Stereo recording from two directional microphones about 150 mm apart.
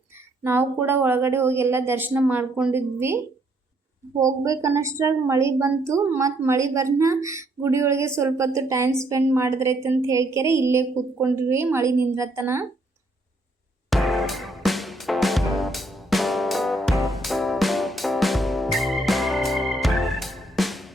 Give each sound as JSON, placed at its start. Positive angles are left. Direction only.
{"t": 0.2, "sound": "a woman's voice", "side_deg": -15}
{"t": 4.2, "sound": "a woman's voice", "side_deg": -20}
{"t": 13.9, "sound": "music", "side_deg": 0}